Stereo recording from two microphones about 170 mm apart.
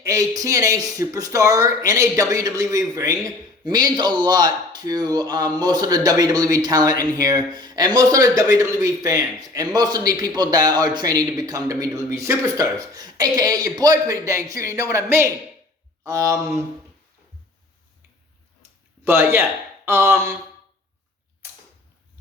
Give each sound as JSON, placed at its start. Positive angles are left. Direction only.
{"t": 0.0, "sound": "a man's voice", "side_deg": -20}
{"t": 19.0, "sound": "speech", "side_deg": -15}